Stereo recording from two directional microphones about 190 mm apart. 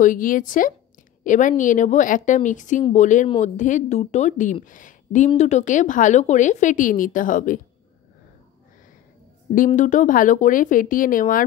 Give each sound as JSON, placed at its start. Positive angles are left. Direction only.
{"t": 0.0, "sound": "a woman's voice", "side_deg": 45}
{"t": 9.8, "sound": "speech", "side_deg": 40}